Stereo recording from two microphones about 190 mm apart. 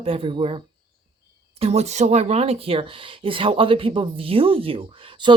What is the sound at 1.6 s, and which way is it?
Speech, 35° right (ahead or behind).